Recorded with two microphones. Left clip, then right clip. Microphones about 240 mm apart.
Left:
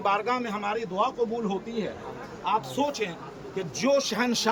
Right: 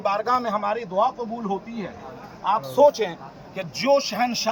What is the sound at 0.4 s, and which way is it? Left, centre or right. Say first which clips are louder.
Speech: right 7 dB; centre.